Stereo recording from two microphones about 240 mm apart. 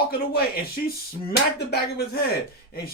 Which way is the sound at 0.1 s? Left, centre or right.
Left.